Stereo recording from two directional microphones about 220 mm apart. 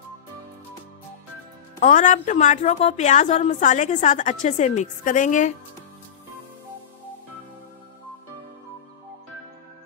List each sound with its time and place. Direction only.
1.8 s a woman's voice: 35° left (ahead or behind)